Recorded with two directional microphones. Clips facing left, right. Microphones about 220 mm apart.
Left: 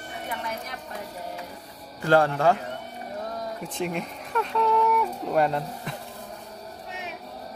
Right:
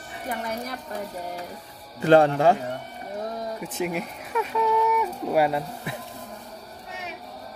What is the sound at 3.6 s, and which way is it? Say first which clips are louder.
Speech: right 1 dB; 5° right (ahead or behind).